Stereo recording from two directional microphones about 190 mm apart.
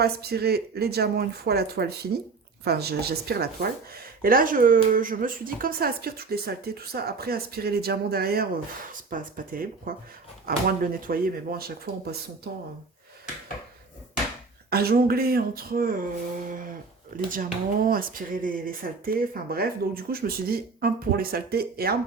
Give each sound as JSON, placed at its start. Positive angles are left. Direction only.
{"t": 0.0, "sound": "speech", "side_deg": -55}
{"t": 14.7, "sound": "speech", "side_deg": -55}
{"t": 17.2, "sound": "speech", "side_deg": -45}